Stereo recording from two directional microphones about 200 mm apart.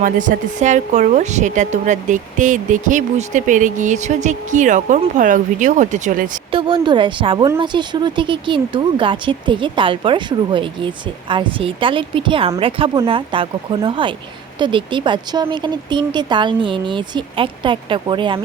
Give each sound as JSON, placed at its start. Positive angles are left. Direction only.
{"t": 0.0, "sound": "a woman's voice", "side_deg": -40}
{"t": 6.5, "sound": "a woman's voice", "side_deg": -25}